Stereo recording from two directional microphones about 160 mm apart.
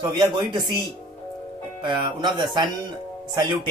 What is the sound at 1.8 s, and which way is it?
Speech, 30° right (ahead or behind).